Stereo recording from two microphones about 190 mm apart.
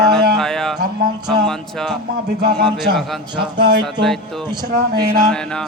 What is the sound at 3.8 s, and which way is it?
Speech, centre (ahead or behind).